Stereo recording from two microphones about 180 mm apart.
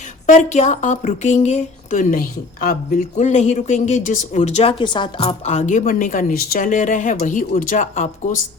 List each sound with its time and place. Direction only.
0.3 s a woman's voice: 40° left (ahead or behind)